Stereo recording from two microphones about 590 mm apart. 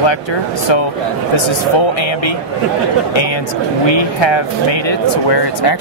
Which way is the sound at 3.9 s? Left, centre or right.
Left.